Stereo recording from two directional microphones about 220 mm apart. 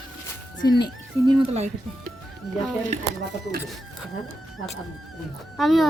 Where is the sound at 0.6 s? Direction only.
20° left (ahead or behind).